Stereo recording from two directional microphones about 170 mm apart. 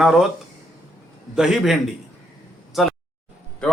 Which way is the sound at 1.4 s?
5° right (ahead or behind).